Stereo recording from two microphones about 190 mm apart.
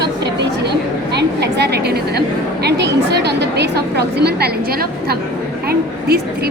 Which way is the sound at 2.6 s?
60° right (ahead or behind).